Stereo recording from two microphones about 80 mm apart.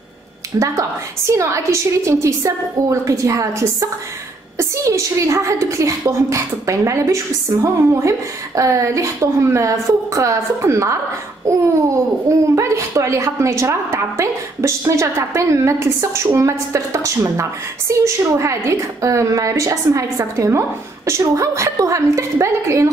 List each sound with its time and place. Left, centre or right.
0.6 s a woman's voice: right